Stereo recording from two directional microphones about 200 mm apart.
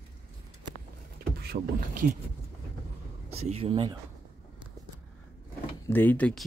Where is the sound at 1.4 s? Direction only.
50° right (ahead or behind).